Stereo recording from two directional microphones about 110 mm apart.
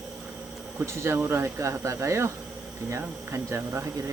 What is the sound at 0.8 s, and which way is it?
Speech, 25° right (ahead or behind).